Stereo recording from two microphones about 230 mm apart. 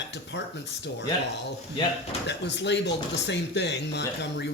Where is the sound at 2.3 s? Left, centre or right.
Left.